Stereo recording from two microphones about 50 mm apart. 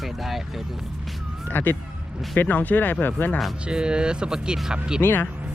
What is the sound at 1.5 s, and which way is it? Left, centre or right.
Speech, left.